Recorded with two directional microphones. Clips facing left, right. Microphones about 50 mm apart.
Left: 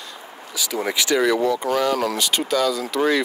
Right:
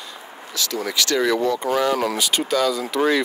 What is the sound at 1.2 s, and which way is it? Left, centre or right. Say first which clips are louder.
Speech: even; centre.